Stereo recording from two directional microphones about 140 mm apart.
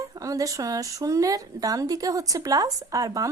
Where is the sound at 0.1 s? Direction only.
25° right (ahead or behind).